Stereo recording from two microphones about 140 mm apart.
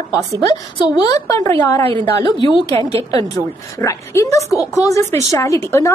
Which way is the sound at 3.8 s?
20° left (ahead or behind).